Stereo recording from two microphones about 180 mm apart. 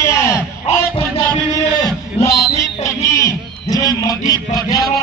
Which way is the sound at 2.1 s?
15° left (ahead or behind).